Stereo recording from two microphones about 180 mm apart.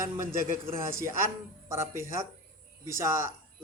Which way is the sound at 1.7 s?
15° right (ahead or behind).